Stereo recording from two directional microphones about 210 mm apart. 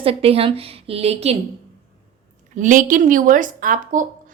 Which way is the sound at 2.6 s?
40° right (ahead or behind).